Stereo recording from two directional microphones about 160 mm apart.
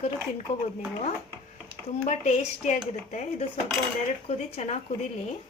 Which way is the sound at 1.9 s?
45° left (ahead or behind).